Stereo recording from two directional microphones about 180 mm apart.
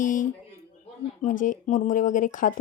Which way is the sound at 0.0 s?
45° left (ahead or behind).